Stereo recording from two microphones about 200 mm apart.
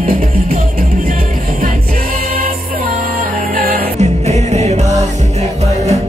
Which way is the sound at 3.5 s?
45° right (ahead or behind).